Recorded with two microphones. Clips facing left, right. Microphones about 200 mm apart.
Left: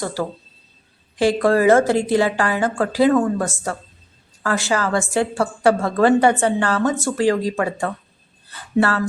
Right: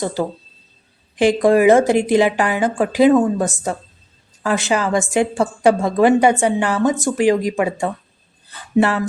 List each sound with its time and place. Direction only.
0.0 s a woman's voice: 20° right (ahead or behind)